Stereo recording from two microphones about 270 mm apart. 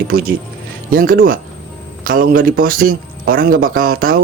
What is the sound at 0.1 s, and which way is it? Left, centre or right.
Speech, right.